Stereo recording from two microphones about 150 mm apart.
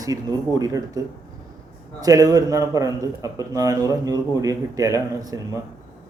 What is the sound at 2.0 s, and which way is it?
Speech, 25° right (ahead or behind).